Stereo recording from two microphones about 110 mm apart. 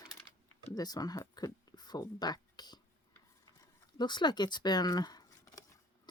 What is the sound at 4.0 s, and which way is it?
Speech, 40° left (ahead or behind).